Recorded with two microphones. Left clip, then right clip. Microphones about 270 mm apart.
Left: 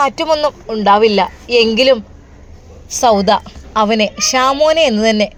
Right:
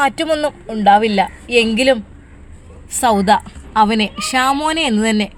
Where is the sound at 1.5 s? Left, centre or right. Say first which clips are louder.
Left 4 dB; right.